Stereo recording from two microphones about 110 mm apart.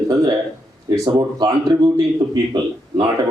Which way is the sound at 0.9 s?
35° right (ahead or behind).